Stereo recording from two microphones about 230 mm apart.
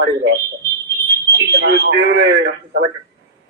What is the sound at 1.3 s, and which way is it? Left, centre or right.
Speech, right.